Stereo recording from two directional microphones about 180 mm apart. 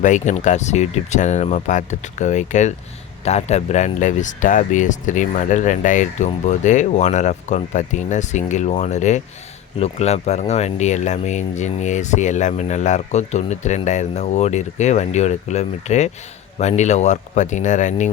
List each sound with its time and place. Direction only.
0.0 s speech: 45° left (ahead or behind)